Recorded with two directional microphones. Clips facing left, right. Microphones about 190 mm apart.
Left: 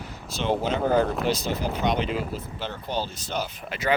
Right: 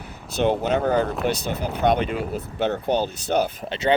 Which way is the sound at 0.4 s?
55° right (ahead or behind).